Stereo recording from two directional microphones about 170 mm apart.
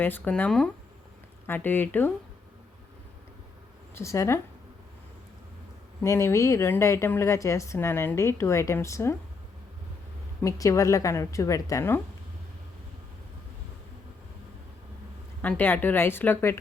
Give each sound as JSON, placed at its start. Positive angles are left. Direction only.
{"t": 0.0, "sound": "speech", "side_deg": 10}
{"t": 3.9, "sound": "speech", "side_deg": 15}
{"t": 6.0, "sound": "speech", "side_deg": 15}
{"t": 10.4, "sound": "a woman's voice", "side_deg": 20}
{"t": 15.4, "sound": "speech", "side_deg": 10}